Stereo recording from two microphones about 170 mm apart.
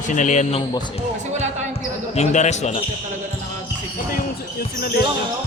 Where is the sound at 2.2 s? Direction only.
45° left (ahead or behind).